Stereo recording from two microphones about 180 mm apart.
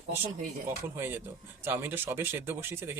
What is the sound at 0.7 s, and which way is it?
Speech, 15° right (ahead or behind).